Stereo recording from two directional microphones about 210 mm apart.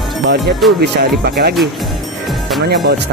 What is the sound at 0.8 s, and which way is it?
Speech, 50° right (ahead or behind).